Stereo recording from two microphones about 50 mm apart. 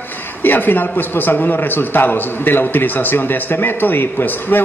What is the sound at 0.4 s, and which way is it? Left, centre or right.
A man's voice, left.